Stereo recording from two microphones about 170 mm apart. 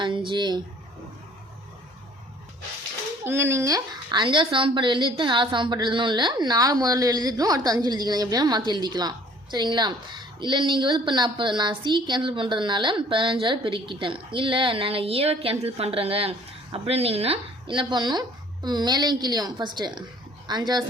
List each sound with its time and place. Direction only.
0.3 s a woman's voice: 25° right (ahead or behind)
3.2 s a woman's voice: 15° right (ahead or behind)